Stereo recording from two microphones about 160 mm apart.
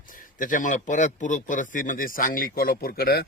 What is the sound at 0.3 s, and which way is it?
A man's voice, 55° left (ahead or behind).